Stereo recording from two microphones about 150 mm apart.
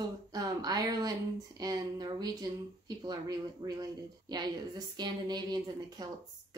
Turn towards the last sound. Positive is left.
turn(degrees=-25)  # may be behind; listen again after turning